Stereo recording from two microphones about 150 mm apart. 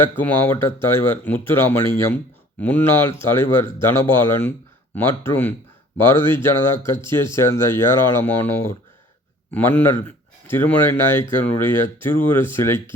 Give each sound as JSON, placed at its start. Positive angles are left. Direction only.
{"t": 0.0, "sound": "a man's voice", "side_deg": 15}